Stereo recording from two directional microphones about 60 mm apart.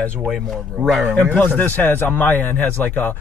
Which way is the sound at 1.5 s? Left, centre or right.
Left.